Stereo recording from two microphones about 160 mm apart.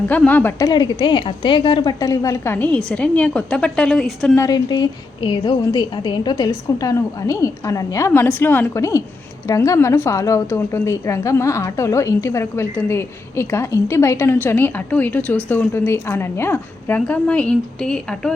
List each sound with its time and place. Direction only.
0.1 s a woman's voice: 10° left (ahead or behind)
0.6 s a woman's voice: 25° left (ahead or behind); by 4.4 s centre (ahead or behind)
4.4 s a woman's voice: 25° left (ahead or behind); by 18.3 s 5° left (ahead or behind)